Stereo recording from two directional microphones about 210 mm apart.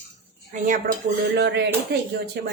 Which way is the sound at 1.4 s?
55° right (ahead or behind).